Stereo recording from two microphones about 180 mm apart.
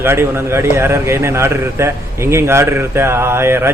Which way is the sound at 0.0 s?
15° right (ahead or behind).